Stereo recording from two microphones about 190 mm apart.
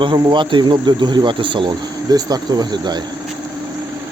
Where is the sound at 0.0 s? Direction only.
25° right (ahead or behind).